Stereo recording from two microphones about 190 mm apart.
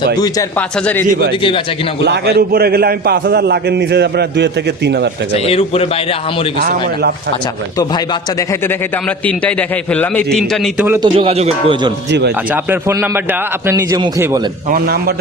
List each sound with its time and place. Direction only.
1.4 s speech: 25° left (ahead or behind)
2.0 s a man's voice: 60° right (ahead or behind)
5.3 s a man's voice: 30° left (ahead or behind)
6.6 s a man's voice: 55° right (ahead or behind)
7.8 s speech: 20° left (ahead or behind)
9.2 s a man's voice: 5° left (ahead or behind)
10.8 s a man's voice: 15° right (ahead or behind)
11.2 s speech: 30° right (ahead or behind)
12.5 s a man's voice: 10° right (ahead or behind)
14.7 s a man's voice: 55° right (ahead or behind)